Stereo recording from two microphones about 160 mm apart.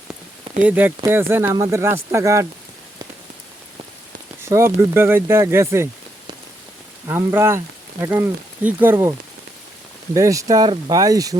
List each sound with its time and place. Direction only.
0.6 s speech: 10° right (ahead or behind)
4.4 s speech: 15° right (ahead or behind)
7.1 s speech: 15° right (ahead or behind)
10.2 s speech: 20° right (ahead or behind)